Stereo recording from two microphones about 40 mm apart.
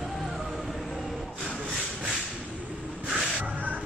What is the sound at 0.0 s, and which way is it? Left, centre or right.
Music, centre.